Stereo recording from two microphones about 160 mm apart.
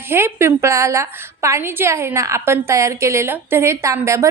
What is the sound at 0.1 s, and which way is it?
A woman's voice, 15° right (ahead or behind).